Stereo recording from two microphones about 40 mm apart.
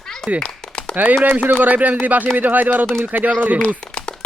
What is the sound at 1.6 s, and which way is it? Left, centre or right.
Speech, right.